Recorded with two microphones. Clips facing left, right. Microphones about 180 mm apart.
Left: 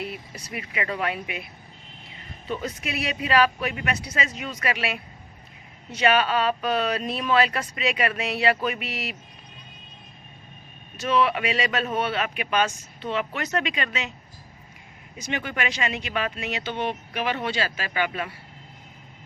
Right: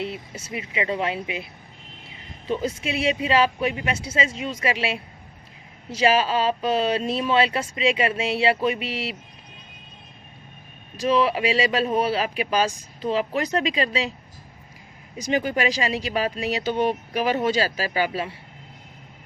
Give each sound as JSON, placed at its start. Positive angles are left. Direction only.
{"t": 0.0, "sound": "speech", "side_deg": -25}
{"t": 10.9, "sound": "speech", "side_deg": -30}
{"t": 15.2, "sound": "speech", "side_deg": -35}